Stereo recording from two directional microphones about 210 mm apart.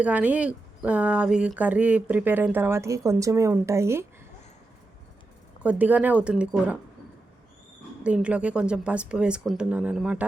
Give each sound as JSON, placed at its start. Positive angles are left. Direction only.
{"t": 0.0, "sound": "speech", "side_deg": -5}
{"t": 5.6, "sound": "speech", "side_deg": -5}
{"t": 8.0, "sound": "speech", "side_deg": -5}